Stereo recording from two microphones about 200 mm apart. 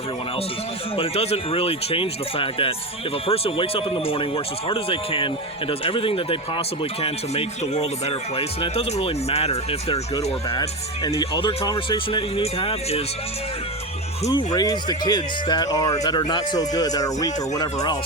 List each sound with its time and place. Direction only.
0.9 s speech: 30° left (ahead or behind)
14.3 s speech: 20° left (ahead or behind)